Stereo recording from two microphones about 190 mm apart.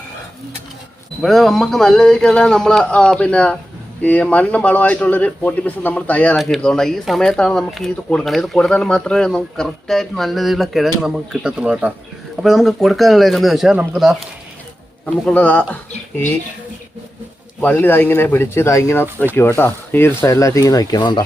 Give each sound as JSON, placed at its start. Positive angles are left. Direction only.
{"t": 1.2, "sound": "speech", "side_deg": 0}
{"t": 15.3, "sound": "speech", "side_deg": 5}
{"t": 17.6, "sound": "speech", "side_deg": 10}